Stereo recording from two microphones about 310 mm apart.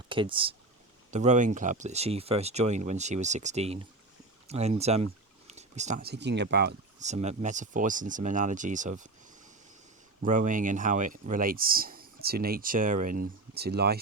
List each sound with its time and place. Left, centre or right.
0.1 s speech: centre
10.2 s speech: right